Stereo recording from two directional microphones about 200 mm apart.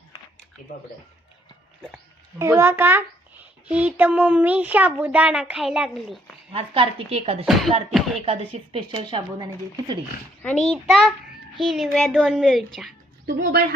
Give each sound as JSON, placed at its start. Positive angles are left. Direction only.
{"t": 2.4, "sound": "speech", "side_deg": -15}
{"t": 6.5, "sound": "speech", "side_deg": -30}
{"t": 7.4, "sound": "a woman's voice", "side_deg": 0}
{"t": 8.2, "sound": "speech", "side_deg": -30}
{"t": 10.4, "sound": "a woman's voice", "side_deg": 0}
{"t": 13.2, "sound": "speech", "side_deg": -55}